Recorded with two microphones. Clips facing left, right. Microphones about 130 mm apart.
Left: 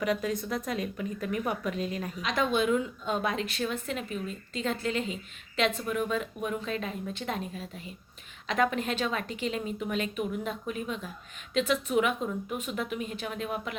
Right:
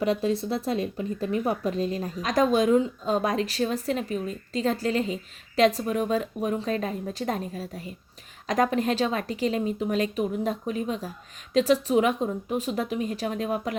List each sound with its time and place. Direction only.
0.0 s a woman's voice: 30° right (ahead or behind)